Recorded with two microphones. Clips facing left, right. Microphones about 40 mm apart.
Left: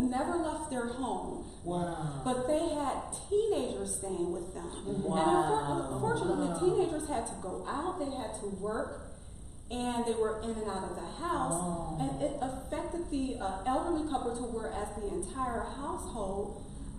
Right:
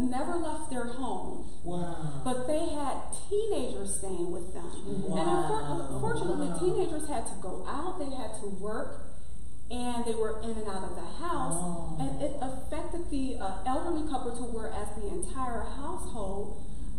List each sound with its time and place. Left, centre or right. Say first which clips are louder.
0.0 s a woman's voice: even; centre
11.6 s a sound: left 1 dB; centre
11.9 s a woman's voice: right 1 dB; centre